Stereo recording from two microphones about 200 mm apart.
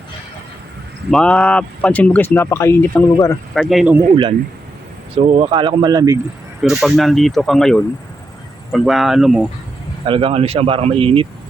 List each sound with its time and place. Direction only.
1.1 s speech: 5° left (ahead or behind)
3.5 s speech: centre (ahead or behind)
4.1 s speech: 25° right (ahead or behind)
6.6 s speech: centre (ahead or behind)
10.1 s speech: 25° right (ahead or behind)